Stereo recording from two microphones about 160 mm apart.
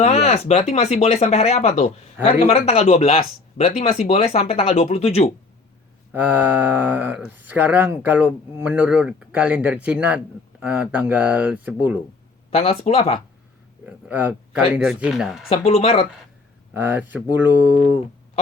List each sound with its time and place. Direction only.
0.0 s speech: 40° left (ahead or behind)
6.1 s speech: 10° right (ahead or behind)
12.5 s speech: 40° left (ahead or behind)
13.8 s speech: 10° right (ahead or behind)
15.4 s speech: 40° left (ahead or behind)
16.7 s speech: 10° right (ahead or behind)